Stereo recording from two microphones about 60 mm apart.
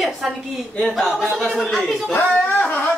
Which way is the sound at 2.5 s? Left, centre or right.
Left.